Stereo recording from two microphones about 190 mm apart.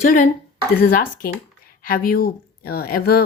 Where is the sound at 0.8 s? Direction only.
50° left (ahead or behind).